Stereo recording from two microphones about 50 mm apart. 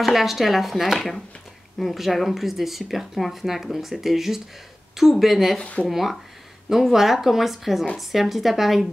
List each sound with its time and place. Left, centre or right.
0.0 s speech: centre
5.6 s speech: left
5.9 s speech: centre